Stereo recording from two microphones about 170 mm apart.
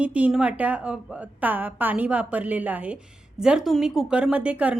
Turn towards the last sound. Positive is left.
turn(degrees=-5)  # may be behind; listen again after turning